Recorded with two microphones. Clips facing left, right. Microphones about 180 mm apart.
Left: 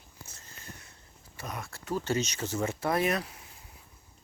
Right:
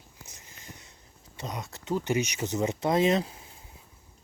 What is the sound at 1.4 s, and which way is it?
Speech, 20° right (ahead or behind).